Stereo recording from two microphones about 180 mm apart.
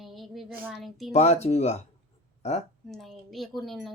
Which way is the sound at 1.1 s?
35° left (ahead or behind).